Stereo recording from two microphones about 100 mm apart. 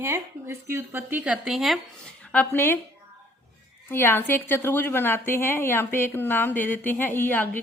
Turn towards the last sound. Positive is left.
turn(degrees=20)  # may be behind; listen again after turning